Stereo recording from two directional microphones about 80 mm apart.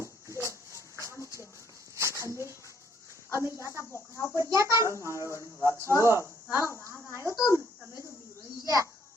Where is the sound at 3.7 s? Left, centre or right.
Left.